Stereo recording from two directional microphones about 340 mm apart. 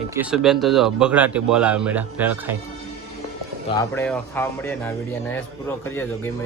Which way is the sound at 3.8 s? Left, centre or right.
Centre.